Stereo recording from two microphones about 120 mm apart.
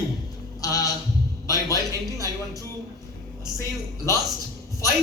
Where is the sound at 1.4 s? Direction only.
30° left (ahead or behind).